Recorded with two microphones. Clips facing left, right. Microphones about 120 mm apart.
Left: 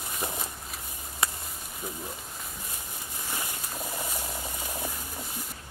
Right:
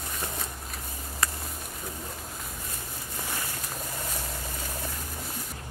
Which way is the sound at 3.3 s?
15° left (ahead or behind).